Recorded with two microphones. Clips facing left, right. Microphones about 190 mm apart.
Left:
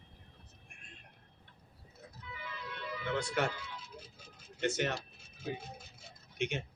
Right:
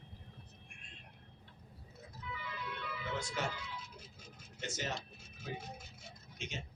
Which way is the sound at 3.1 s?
65° left (ahead or behind).